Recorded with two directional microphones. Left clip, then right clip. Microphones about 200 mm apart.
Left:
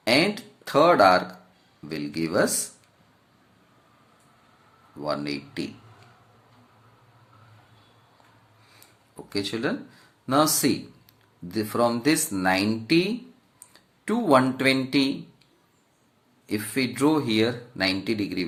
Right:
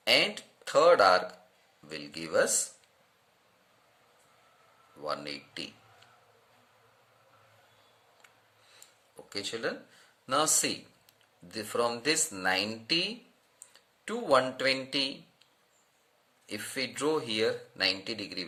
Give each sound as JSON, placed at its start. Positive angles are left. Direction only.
{"t": 0.0, "sound": "speech", "side_deg": -15}
{"t": 5.0, "sound": "speech", "side_deg": -15}
{"t": 9.3, "sound": "speech", "side_deg": -15}
{"t": 16.5, "sound": "speech", "side_deg": -15}